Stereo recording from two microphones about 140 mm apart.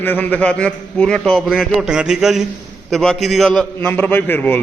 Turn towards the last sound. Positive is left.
turn(degrees=15)  # may be behind; listen again after turning